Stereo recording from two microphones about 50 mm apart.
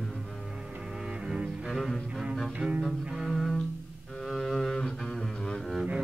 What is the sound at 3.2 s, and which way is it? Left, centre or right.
Music, centre.